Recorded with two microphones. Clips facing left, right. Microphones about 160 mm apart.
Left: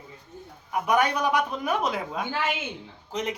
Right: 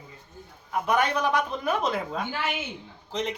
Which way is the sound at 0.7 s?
10° left (ahead or behind).